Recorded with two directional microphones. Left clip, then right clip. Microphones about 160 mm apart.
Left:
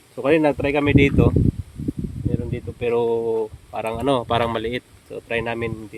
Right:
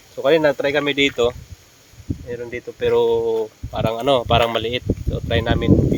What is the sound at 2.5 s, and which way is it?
Speech, 15° left (ahead or behind).